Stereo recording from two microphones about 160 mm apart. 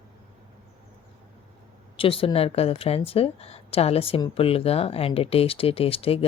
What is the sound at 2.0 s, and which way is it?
Speech, 35° left (ahead or behind).